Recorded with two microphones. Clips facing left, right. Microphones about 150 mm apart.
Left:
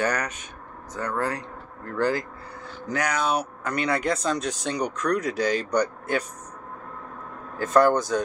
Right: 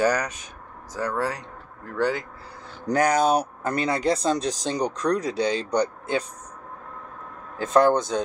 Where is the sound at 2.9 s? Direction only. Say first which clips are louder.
Right 5 dB; 45° right (ahead or behind); by 6.2 s 25° right (ahead or behind).